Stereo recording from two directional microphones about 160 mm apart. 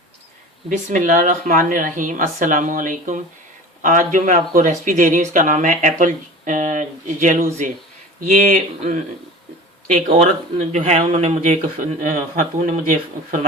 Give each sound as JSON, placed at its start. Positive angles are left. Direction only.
{"t": 0.7, "sound": "speech", "side_deg": -50}
{"t": 10.6, "sound": "speech", "side_deg": -50}